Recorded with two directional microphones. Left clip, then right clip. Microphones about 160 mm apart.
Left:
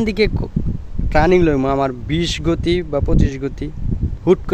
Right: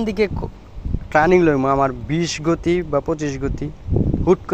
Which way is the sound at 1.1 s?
20° left (ahead or behind).